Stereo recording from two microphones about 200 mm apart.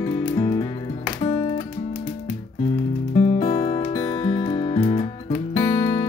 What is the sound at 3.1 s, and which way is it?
Music, 25° left (ahead or behind).